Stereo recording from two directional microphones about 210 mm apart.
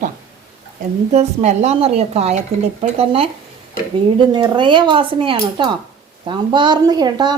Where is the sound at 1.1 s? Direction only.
30° right (ahead or behind).